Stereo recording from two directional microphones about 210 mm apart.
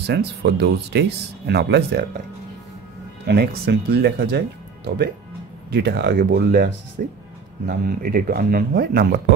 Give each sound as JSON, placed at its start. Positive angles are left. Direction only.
{"t": 0.0, "sound": "speech", "side_deg": -55}
{"t": 3.3, "sound": "speech", "side_deg": -50}